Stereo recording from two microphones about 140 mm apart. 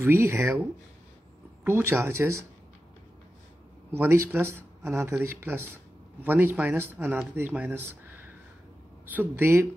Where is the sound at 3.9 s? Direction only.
15° right (ahead or behind).